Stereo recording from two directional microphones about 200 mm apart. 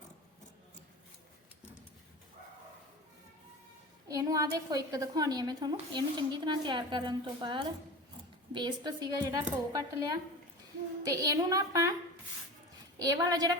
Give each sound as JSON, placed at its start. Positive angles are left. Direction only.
{"t": 4.1, "sound": "a woman's voice", "side_deg": -15}
{"t": 13.0, "sound": "speech", "side_deg": -20}